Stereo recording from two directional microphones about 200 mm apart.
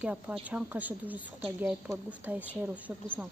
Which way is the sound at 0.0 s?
5° right (ahead or behind).